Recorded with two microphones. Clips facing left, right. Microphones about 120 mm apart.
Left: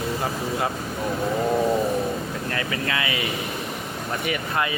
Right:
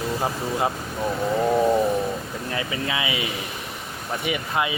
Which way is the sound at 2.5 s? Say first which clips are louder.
Right 1 dB; 15° right (ahead or behind).